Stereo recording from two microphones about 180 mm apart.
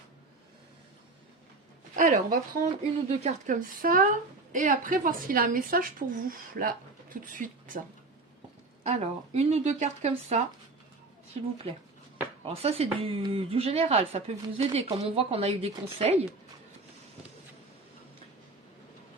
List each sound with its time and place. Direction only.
2.0 s speech: 50° right (ahead or behind)
8.8 s speech: 40° right (ahead or behind)
12.5 s speech: 35° right (ahead or behind)